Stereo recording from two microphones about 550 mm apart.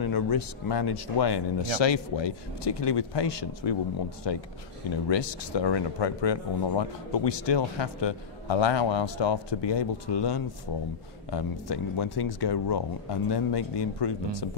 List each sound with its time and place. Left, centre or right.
0.0 s speech: left